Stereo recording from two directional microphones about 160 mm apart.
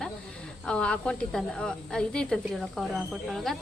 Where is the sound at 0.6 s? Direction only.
5° left (ahead or behind).